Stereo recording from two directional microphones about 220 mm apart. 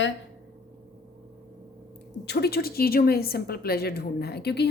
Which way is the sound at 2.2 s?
45° left (ahead or behind).